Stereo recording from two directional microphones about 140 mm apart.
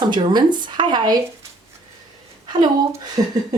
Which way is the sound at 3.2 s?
30° right (ahead or behind).